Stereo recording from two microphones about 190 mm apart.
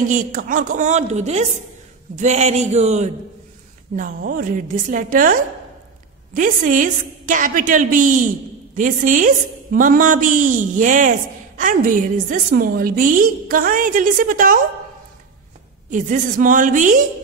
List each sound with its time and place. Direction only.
0.1 s a woman's voice: 45° right (ahead or behind)
15.9 s a woman's voice: 45° right (ahead or behind)